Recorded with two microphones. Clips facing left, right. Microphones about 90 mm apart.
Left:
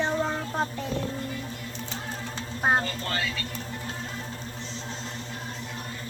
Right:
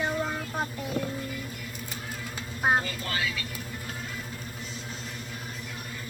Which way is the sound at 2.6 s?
Centre (ahead or behind).